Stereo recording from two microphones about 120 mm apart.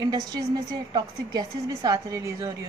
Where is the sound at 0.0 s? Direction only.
35° right (ahead or behind).